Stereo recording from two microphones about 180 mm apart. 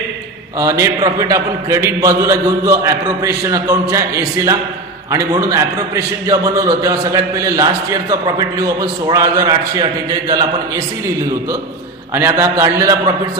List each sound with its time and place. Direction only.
0.6 s a man's voice: 15° right (ahead or behind)
12.1 s a man's voice: 15° right (ahead or behind)